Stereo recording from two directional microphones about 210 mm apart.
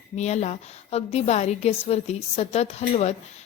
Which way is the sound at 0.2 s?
30° left (ahead or behind).